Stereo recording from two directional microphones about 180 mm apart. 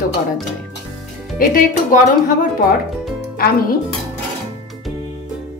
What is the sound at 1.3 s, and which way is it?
Speech, 50° left (ahead or behind).